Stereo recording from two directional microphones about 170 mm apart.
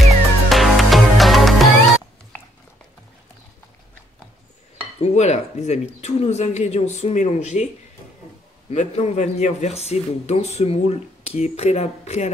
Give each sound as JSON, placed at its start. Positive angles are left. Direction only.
{"t": 0.5, "sound": "music", "side_deg": 0}
{"t": 5.0, "sound": "speech", "side_deg": 40}